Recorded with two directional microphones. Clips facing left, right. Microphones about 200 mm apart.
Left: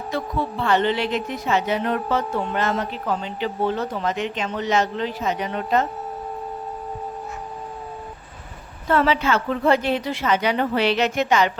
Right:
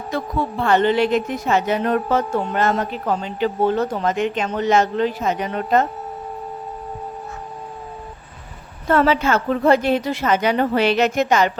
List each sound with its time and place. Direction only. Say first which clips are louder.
0.1 s speech: right 2 dB; 45° right (ahead or behind)
8.9 s speech: right 3 dB; 45° right (ahead or behind)